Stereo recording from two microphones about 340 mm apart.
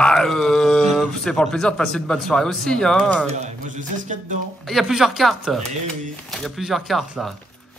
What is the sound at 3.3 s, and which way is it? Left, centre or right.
A man's voice, right.